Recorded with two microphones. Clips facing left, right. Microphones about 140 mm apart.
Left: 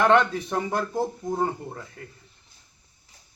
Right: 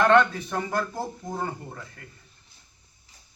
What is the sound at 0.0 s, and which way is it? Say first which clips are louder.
Speech: even; 20° left (ahead or behind).